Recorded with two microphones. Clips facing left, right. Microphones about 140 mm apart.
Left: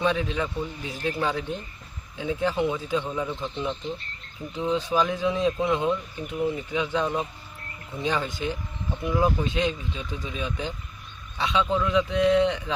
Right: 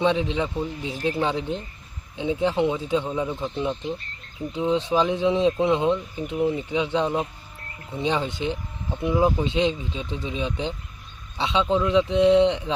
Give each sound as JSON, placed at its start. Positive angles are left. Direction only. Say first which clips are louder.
{"t": 0.0, "sound": "speech", "louder": "right 3 dB", "side_deg": -25}